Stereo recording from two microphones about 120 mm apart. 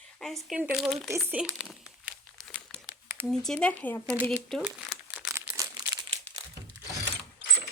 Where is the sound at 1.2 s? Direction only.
10° right (ahead or behind).